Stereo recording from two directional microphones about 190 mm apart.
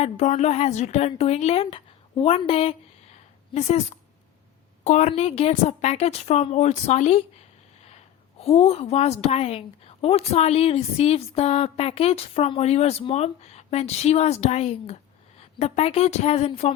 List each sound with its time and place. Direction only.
0.0 s a woman's voice: 35° left (ahead or behind)
8.4 s a woman's voice: 30° left (ahead or behind)